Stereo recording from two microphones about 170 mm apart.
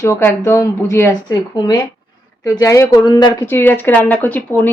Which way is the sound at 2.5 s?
20° left (ahead or behind).